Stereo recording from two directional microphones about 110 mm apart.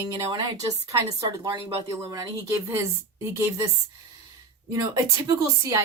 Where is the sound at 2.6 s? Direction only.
25° right (ahead or behind).